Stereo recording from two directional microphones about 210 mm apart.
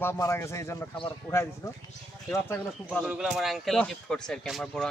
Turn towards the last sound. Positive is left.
turn(degrees=0)  # may be behind; listen again after turning